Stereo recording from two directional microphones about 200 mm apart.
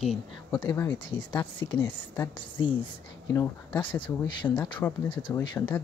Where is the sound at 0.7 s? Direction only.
10° left (ahead or behind).